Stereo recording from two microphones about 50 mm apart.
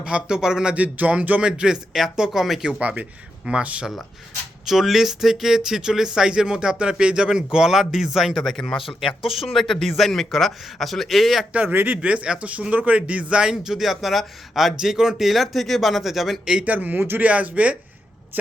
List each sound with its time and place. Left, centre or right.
0.0 s speech: centre
0.8 s a sound: right
1.4 s speech: centre
2.8 s a man's voice: right
4.6 s speech: centre
8.4 s speech: centre
11.7 s speech: right
12.0 s a man's voice: right
13.5 s speech: centre
16.6 s a sound: right
17.2 s a man's voice: right